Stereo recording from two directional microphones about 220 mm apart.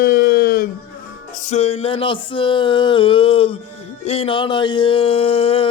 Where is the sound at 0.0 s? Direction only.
40° left (ahead or behind).